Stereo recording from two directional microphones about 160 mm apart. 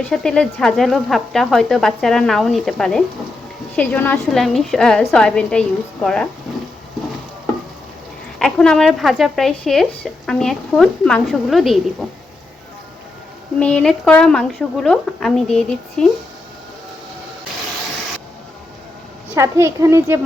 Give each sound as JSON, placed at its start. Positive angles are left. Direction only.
{"t": 0.1, "sound": "a woman's voice", "side_deg": 5}
{"t": 4.4, "sound": "speech", "side_deg": 0}
{"t": 8.4, "sound": "speech", "side_deg": 5}
{"t": 13.6, "sound": "speech", "side_deg": 5}
{"t": 19.3, "sound": "a child's voice", "side_deg": -15}